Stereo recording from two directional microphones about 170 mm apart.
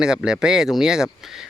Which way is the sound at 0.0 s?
5° right (ahead or behind).